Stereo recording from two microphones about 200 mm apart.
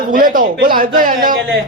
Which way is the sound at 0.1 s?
45° right (ahead or behind).